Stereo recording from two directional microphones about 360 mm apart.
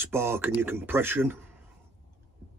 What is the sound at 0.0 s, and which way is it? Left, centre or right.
Speech, centre.